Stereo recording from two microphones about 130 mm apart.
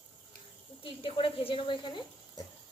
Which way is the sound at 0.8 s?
40° left (ahead or behind).